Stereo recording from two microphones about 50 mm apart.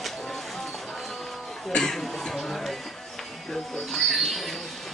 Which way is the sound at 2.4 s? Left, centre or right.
Centre.